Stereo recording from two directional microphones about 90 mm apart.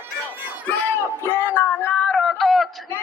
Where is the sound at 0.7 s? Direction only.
20° left (ahead or behind); by 2.7 s centre (ahead or behind).